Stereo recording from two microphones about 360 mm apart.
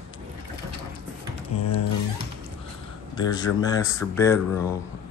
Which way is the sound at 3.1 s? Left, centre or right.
Centre.